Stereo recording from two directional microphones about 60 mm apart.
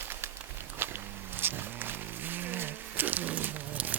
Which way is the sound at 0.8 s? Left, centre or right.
Right.